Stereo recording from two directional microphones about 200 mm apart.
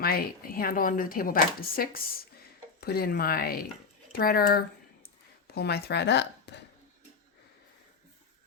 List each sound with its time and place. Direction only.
0.0 s speech: 50° left (ahead or behind)